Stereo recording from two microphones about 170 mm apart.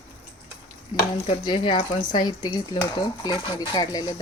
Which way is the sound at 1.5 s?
30° left (ahead or behind).